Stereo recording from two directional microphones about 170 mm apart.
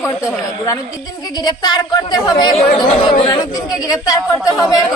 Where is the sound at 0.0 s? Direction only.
20° left (ahead or behind).